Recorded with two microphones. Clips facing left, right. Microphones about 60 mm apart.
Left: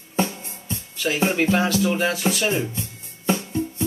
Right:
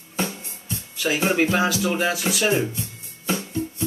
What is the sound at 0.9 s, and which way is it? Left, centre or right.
Speech, centre.